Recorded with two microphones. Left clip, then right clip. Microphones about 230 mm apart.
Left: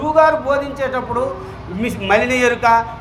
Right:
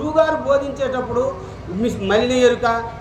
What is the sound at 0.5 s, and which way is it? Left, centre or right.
Speech, left.